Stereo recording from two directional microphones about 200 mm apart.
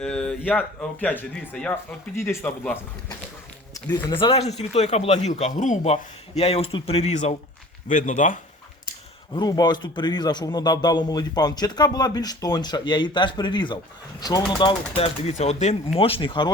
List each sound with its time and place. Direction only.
0.0 s speech: 5° left (ahead or behind)
3.8 s speech: 25° left (ahead or behind); by 8.4 s 40° left (ahead or behind)
9.3 s a man's voice: 20° left (ahead or behind)